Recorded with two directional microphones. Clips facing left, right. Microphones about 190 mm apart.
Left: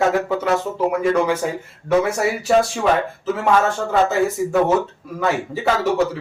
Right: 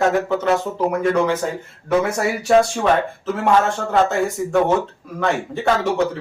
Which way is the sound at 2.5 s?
Centre (ahead or behind).